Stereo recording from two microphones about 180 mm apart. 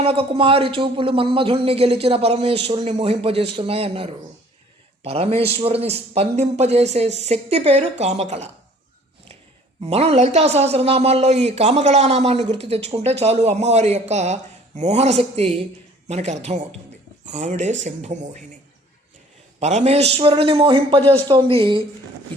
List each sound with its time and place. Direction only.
0.0 s speech: 30° right (ahead or behind)
9.8 s speech: 35° right (ahead or behind)
19.5 s speech: 40° right (ahead or behind)